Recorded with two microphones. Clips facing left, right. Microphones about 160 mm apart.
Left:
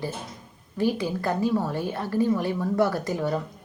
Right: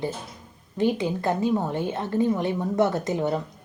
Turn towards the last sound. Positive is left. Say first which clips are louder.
# right 1 dB
turn(degrees=-20)  # may be behind; listen again after turning